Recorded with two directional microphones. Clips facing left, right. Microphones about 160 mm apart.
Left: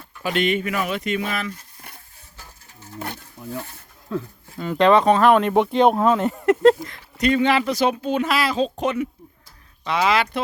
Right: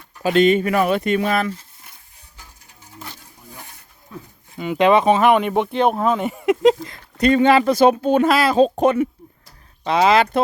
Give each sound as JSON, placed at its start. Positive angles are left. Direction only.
{"t": 0.2, "sound": "speech", "side_deg": -35}
{"t": 3.0, "sound": "a sound", "side_deg": 60}
{"t": 4.1, "sound": "speech", "side_deg": 90}
{"t": 4.5, "sound": "speech", "side_deg": -5}
{"t": 5.0, "sound": "speech", "side_deg": -20}
{"t": 5.3, "sound": "speech", "side_deg": -5}
{"t": 6.4, "sound": "speech", "side_deg": -10}
{"t": 7.2, "sound": "speech", "side_deg": -40}
{"t": 9.8, "sound": "speech", "side_deg": -35}